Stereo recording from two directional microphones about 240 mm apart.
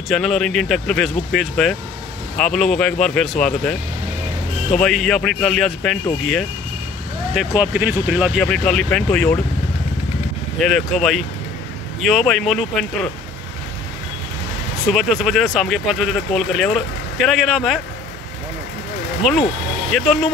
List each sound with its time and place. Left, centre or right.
0.1 s speech: centre
4.8 s speech: centre
7.3 s speech: centre
10.6 s speech: centre
14.9 s speech: centre
19.2 s speech: centre